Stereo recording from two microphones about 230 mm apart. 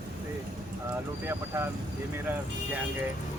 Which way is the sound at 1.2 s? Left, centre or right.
Centre.